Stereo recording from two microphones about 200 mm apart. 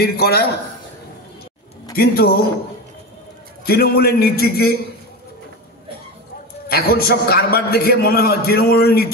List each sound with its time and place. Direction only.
0.0 s a man's voice: 50° left (ahead or behind)
2.0 s a man's voice: 50° left (ahead or behind)
3.6 s a man's voice: 50° left (ahead or behind)
6.7 s a man's voice: 50° left (ahead or behind)